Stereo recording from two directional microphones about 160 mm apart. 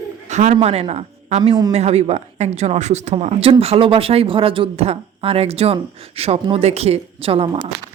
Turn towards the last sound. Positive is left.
turn(degrees=-30)  # may be behind; listen again after turning